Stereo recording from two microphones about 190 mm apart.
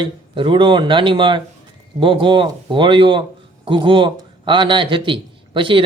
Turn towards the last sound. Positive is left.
turn(degrees=-25)  # may be behind; listen again after turning